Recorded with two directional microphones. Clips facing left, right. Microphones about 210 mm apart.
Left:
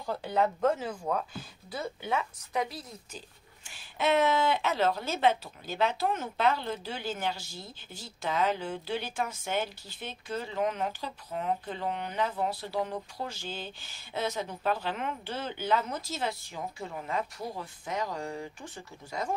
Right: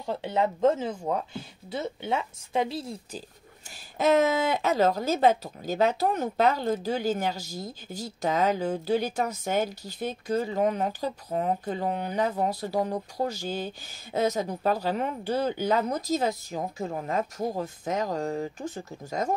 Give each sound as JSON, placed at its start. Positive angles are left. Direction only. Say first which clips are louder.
{"t": 0.0, "sound": "speech", "louder": "right 2 dB", "side_deg": -25}
{"t": 3.7, "sound": "speech", "louder": "right 5 dB", "side_deg": -40}